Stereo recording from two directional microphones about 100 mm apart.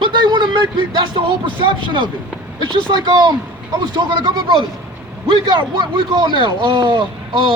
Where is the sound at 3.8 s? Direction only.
45° right (ahead or behind).